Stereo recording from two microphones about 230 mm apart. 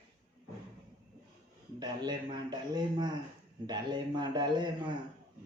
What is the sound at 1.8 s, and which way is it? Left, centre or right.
A man's voice, centre.